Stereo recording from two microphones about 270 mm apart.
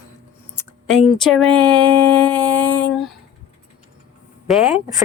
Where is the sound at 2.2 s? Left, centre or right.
Centre.